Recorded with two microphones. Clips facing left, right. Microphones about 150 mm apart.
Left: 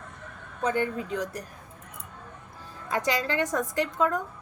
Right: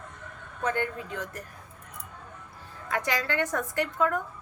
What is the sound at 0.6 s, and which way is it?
Speech, 15° left (ahead or behind).